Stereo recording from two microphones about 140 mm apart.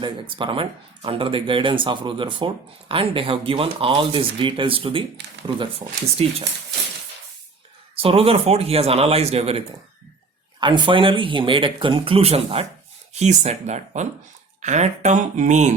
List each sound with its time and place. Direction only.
0.0 s speech: 35° right (ahead or behind)
7.9 s speech: 45° right (ahead or behind)
10.6 s speech: 35° right (ahead or behind); by 15.7 s 60° right (ahead or behind)